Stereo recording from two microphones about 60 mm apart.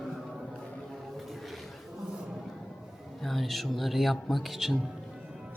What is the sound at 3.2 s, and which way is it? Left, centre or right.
Speech, centre.